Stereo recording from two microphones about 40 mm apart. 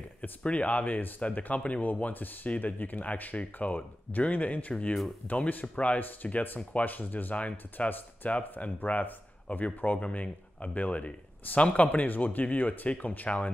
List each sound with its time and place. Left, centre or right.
0.4 s speech: left
9.9 s speech: left